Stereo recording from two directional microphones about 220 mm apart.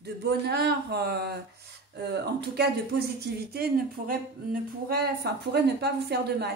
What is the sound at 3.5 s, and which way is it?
Speech, 45° right (ahead or behind).